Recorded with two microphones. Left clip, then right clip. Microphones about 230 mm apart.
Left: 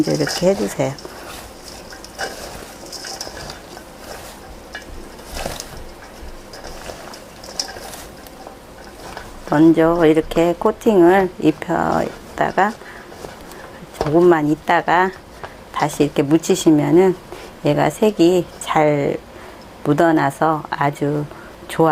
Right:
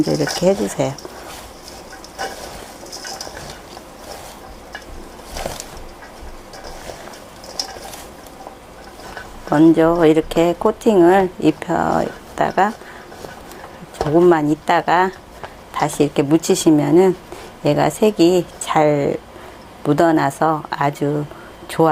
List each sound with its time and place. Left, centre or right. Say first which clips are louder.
0.0 s speech: even; right
9.5 s speech: right 1 dB; right
14.0 s speech: even; right